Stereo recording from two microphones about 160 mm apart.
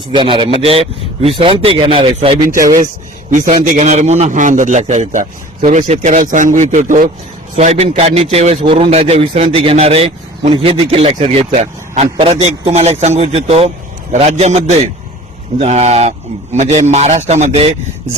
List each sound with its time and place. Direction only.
0.1 s a man's voice: 30° right (ahead or behind)
2.6 s a man's voice: 55° right (ahead or behind)